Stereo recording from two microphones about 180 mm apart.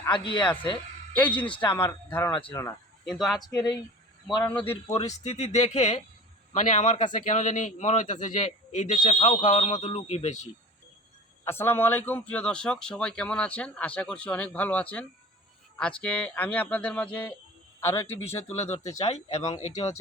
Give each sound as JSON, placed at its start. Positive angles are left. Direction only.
{"t": 0.1, "sound": "speech", "side_deg": 25}
{"t": 3.0, "sound": "speech", "side_deg": 0}
{"t": 3.5, "sound": "speech", "side_deg": 20}
{"t": 4.7, "sound": "a man's voice", "side_deg": 35}
{"t": 11.4, "sound": "a man's voice", "side_deg": 10}
{"t": 19.0, "sound": "a man's voice", "side_deg": 40}
{"t": 19.4, "sound": "speech", "side_deg": 20}